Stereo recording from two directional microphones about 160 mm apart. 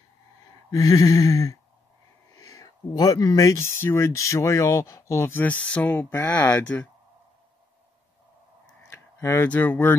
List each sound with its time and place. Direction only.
0.7 s speech: 25° left (ahead or behind)
9.2 s speech: 15° left (ahead or behind)